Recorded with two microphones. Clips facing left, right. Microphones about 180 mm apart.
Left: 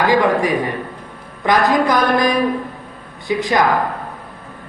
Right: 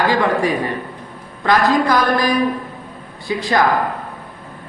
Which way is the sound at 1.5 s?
20° left (ahead or behind).